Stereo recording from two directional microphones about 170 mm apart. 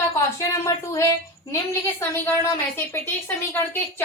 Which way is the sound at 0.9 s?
20° left (ahead or behind).